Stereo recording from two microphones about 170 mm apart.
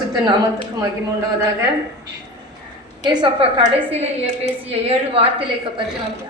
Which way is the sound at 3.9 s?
35° right (ahead or behind).